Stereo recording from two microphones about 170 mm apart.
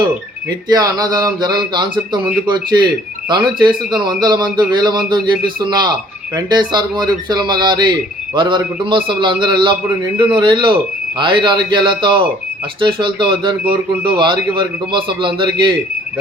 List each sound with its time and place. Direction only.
0.7 s speech: 20° right (ahead or behind)